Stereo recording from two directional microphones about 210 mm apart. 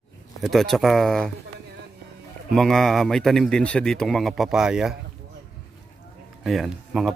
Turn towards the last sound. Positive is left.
turn(degrees=0)  # may be behind; listen again after turning